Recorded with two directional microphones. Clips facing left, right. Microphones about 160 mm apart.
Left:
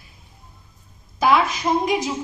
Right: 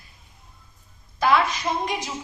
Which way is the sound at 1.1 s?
10° left (ahead or behind).